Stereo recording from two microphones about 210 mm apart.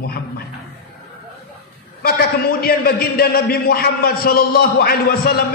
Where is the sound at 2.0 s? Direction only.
45° left (ahead or behind).